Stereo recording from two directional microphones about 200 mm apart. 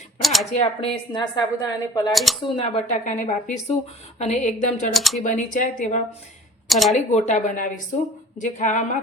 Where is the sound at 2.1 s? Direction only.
Centre (ahead or behind).